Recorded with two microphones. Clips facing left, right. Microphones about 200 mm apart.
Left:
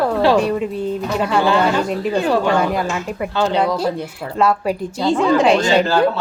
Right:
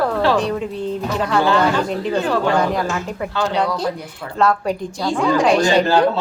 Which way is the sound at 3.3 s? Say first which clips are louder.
Left 3 dB; 20° left (ahead or behind).